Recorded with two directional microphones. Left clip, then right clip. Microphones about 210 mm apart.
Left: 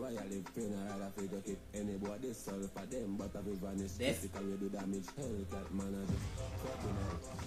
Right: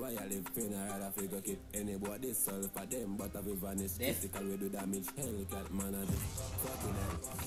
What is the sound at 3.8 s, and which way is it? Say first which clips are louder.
Speech: left 2 dB; 15° right (ahead or behind).